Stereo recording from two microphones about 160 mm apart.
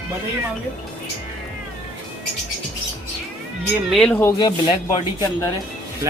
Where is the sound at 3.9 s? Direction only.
5° left (ahead or behind).